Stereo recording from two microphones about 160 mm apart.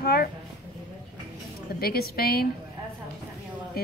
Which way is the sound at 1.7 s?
70° left (ahead or behind).